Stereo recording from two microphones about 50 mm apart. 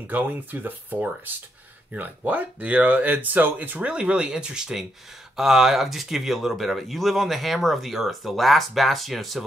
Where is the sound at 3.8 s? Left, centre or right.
Right.